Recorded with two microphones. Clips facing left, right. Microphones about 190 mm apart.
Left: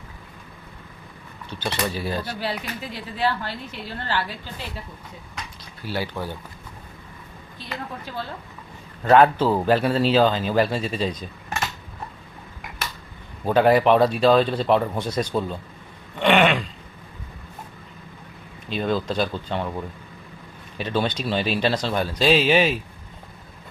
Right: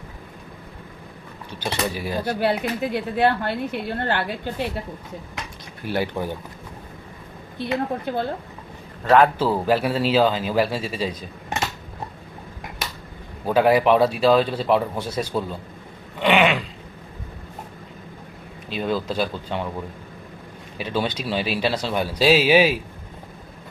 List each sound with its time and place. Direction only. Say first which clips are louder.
1.9 s speech: left 1 dB; 15° right (ahead or behind)
2.2 s speech: right 7 dB; 55° right (ahead or behind)
5.9 s speech: right 4 dB; 20° right (ahead or behind)
7.6 s speech: right 10 dB; 60° right (ahead or behind)
9.0 s speech: left 1 dB; centre (ahead or behind)
13.4 s speech: even; 5° right (ahead or behind)
16.1 s a sound: even; 10° right (ahead or behind)
18.7 s speech: left 1 dB; 5° right (ahead or behind)
20.7 s speech: left 1 dB; 10° right (ahead or behind)